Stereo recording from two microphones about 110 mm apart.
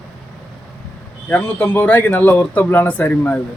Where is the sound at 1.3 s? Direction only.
15° left (ahead or behind).